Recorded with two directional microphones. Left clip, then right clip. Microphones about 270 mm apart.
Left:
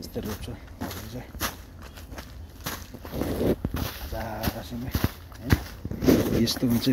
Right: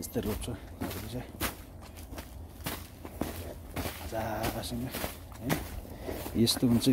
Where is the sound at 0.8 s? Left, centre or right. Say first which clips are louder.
Left 3 dB; centre.